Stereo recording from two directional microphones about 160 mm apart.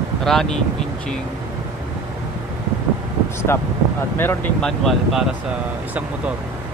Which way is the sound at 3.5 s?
15° left (ahead or behind).